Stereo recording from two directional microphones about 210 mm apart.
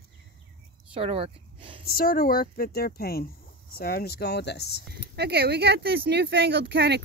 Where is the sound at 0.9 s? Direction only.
25° right (ahead or behind).